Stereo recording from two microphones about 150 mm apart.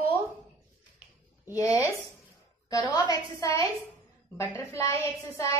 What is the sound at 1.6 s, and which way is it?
A woman's voice, 20° left (ahead or behind).